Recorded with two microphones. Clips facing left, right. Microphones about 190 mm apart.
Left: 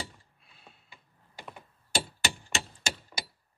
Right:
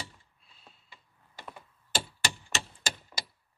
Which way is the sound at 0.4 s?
60° left (ahead or behind).